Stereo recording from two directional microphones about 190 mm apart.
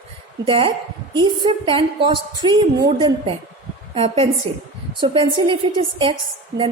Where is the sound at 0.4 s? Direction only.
30° right (ahead or behind).